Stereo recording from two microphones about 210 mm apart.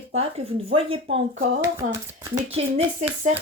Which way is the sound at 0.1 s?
30° right (ahead or behind).